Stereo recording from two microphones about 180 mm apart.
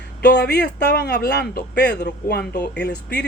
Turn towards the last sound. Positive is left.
turn(degrees=65)  # may be behind; listen again after turning